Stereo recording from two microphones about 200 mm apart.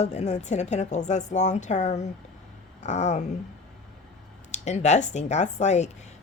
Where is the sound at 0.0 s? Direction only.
35° left (ahead or behind).